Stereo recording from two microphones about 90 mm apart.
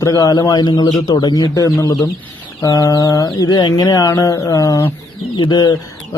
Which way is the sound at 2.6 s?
40° left (ahead or behind).